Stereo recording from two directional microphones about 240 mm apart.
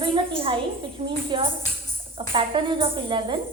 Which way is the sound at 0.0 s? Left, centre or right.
Right.